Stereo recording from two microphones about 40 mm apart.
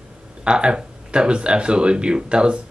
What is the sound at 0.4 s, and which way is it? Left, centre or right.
Speech, right.